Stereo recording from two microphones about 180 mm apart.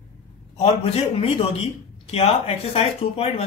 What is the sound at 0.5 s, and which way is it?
Speech, 35° left (ahead or behind).